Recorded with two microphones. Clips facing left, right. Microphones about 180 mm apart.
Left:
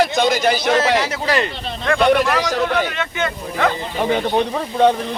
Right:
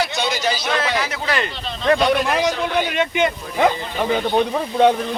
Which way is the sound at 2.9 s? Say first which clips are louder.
Right 4 dB; 15° right (ahead or behind).